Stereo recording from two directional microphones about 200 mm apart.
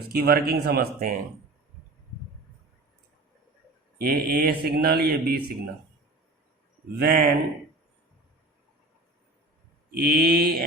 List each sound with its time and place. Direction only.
0.1 s speech: 50° right (ahead or behind)
4.0 s speech: 50° right (ahead or behind)
6.9 s speech: 50° right (ahead or behind)
9.9 s speech: 50° right (ahead or behind)